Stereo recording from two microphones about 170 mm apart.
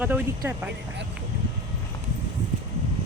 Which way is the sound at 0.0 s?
10° right (ahead or behind).